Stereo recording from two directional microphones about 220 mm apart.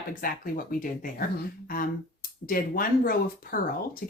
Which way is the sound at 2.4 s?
40° left (ahead or behind).